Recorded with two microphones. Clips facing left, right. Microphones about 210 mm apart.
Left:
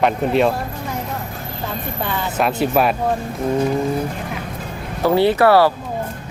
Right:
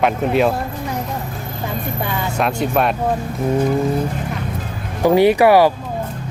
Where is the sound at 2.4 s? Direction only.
5° left (ahead or behind).